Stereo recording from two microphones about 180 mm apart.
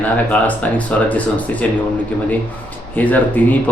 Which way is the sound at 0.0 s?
10° left (ahead or behind).